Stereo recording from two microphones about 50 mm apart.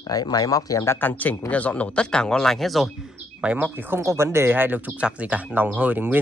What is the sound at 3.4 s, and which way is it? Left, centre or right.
Speech, right.